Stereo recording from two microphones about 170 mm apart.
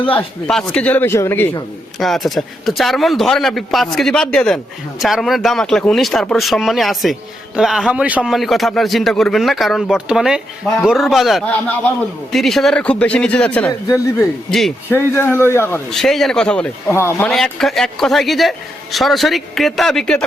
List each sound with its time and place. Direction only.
0.0 s speech: 10° left (ahead or behind)
2.0 s speech: centre (ahead or behind)
15.9 s speech: centre (ahead or behind)
17.3 s speech: centre (ahead or behind)